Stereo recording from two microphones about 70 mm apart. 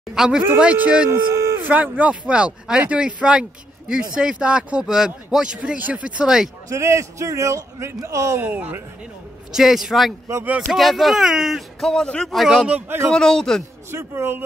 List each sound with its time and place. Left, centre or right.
0.1 s speech: centre
1.3 s a sound: right
1.6 s speech: right
5.6 s speech: right
6.7 s a man's voice: right
8.4 s speech: right
9.5 s speech: centre
11.9 s a man's voice: centre
12.4 s speech: centre
12.8 s speech: right
13.1 s a man's voice: centre
13.9 s speech: right